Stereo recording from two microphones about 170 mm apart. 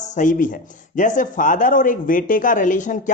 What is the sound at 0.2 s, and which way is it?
Speech, 50° left (ahead or behind).